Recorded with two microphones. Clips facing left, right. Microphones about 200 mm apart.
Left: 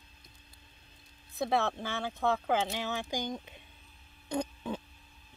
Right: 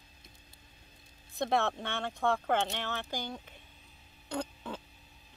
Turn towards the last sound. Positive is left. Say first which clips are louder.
# left 3 dB
turn(degrees=20)  # may be behind; listen again after turning